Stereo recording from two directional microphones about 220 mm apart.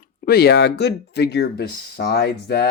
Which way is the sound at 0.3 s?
45° left (ahead or behind).